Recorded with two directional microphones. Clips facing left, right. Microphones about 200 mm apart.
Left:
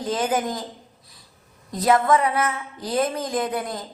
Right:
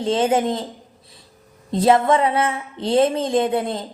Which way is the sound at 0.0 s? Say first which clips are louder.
Right 5 dB; 25° right (ahead or behind).